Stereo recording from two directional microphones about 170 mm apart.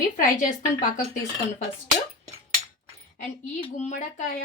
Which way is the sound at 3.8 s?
45° left (ahead or behind).